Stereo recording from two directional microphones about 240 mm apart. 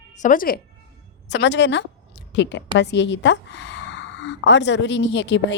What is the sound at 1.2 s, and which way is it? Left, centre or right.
A woman's voice, left.